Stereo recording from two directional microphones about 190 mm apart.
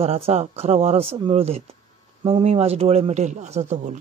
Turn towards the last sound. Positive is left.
turn(degrees=-35)  # may be behind; listen again after turning